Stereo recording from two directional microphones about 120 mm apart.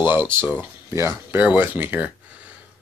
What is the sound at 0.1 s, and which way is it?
Speech, 15° right (ahead or behind).